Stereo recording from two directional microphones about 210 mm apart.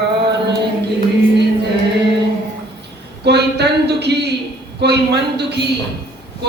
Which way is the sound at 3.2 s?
50° right (ahead or behind).